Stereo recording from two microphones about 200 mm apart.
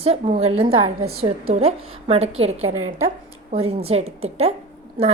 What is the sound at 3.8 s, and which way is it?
Speech, 30° right (ahead or behind).